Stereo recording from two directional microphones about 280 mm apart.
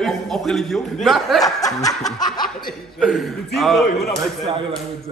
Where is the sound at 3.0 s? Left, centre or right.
Centre.